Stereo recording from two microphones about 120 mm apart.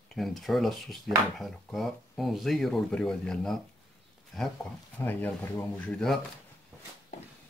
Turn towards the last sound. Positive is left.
turn(degrees=5)  # may be behind; listen again after turning